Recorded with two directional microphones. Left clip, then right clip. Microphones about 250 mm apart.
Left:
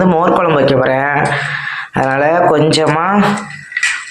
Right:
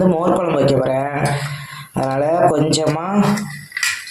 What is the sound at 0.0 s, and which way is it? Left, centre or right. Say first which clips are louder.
Speech: left 5 dB; centre.